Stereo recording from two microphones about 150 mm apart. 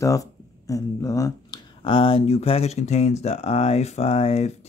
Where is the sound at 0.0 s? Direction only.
20° left (ahead or behind).